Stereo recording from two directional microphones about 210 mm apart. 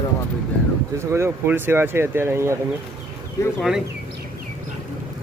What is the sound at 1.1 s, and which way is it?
Speech, 10° right (ahead or behind).